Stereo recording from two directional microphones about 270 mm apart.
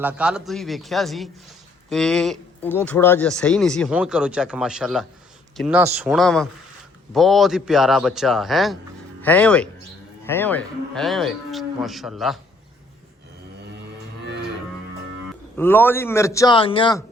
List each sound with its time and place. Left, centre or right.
0.0 s speech: centre
14.2 s music: right
15.5 s a man's voice: centre